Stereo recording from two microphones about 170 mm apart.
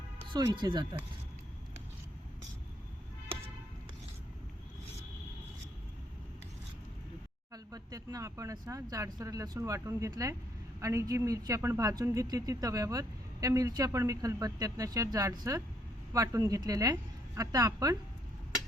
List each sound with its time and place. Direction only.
0.3 s a woman's voice: 25° right (ahead or behind)
7.5 s a woman's voice: 20° right (ahead or behind)